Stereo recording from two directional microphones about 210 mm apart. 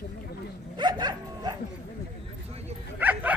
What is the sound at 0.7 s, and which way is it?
Speech, 20° right (ahead or behind).